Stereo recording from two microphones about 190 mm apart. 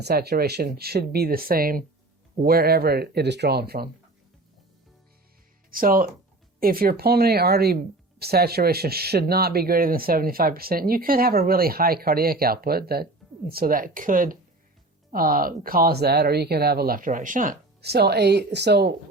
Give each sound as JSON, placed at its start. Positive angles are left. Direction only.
{"t": 0.0, "sound": "speech", "side_deg": -55}
{"t": 5.7, "sound": "speech", "side_deg": -50}